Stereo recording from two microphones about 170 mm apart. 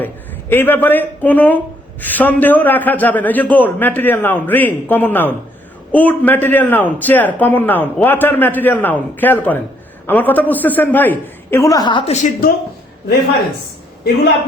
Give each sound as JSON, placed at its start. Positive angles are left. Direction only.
{"t": 0.0, "sound": "a man's voice", "side_deg": 10}
{"t": 12.1, "sound": "speech", "side_deg": 45}